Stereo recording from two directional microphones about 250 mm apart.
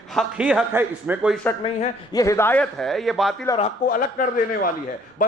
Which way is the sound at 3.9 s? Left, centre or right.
Left.